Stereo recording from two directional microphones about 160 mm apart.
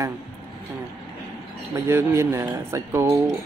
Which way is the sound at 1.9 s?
15° right (ahead or behind).